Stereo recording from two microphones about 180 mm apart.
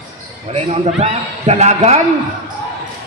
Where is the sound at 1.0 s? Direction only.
40° right (ahead or behind).